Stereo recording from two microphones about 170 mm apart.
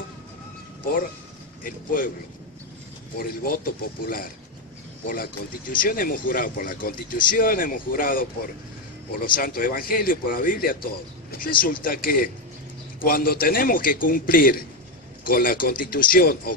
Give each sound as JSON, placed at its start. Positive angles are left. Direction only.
{"t": 1.6, "sound": "speech", "side_deg": 55}
{"t": 3.2, "sound": "speech", "side_deg": 55}